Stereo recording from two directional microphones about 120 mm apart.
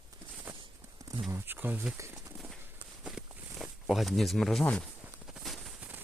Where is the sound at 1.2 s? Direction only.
20° right (ahead or behind).